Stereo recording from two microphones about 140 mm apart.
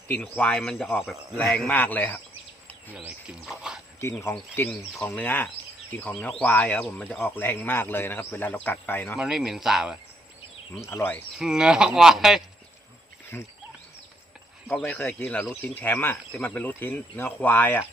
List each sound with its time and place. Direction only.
0.1 s speech: 10° left (ahead or behind)
2.9 s speech: 5° right (ahead or behind)
4.2 s speech: 15° left (ahead or behind)
9.1 s speech: 5° right (ahead or behind)
10.8 s speech: 15° left (ahead or behind)
11.3 s speech: 5° right (ahead or behind)
13.3 s speech: 15° left (ahead or behind)
14.7 s speech: 15° left (ahead or behind)